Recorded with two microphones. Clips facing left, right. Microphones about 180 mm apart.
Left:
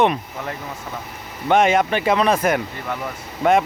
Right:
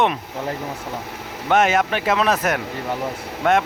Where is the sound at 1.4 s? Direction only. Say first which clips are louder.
Left 2 dB; centre (ahead or behind).